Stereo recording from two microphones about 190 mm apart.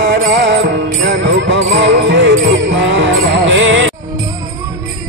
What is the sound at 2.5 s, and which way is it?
Jingle bell, 75° right (ahead or behind).